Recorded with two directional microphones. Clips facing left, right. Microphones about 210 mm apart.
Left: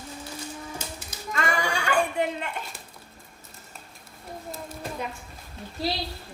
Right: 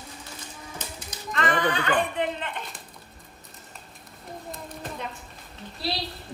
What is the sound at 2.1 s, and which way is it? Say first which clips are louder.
Speech: left 1 dB; 5° left (ahead or behind).